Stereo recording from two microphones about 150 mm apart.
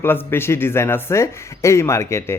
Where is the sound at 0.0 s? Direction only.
15° left (ahead or behind).